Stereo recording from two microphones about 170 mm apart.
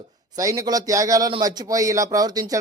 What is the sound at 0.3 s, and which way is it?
Speech, 20° right (ahead or behind).